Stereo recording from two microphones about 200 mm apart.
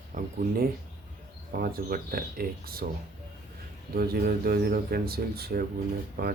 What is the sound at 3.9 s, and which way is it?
Speech, 50° right (ahead or behind).